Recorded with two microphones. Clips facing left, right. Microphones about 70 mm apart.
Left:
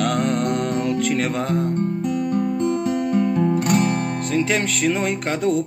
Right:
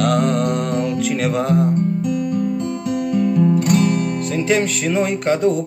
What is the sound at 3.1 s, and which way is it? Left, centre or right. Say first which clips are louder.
Guitar: right 5 dB; left.